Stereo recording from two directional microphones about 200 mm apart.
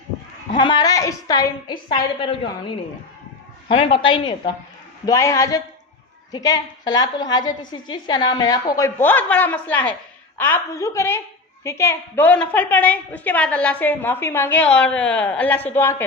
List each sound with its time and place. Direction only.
0.5 s a woman's voice: 25° left (ahead or behind)